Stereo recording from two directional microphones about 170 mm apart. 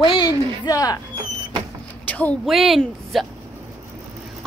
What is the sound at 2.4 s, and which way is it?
Speech, centre (ahead or behind).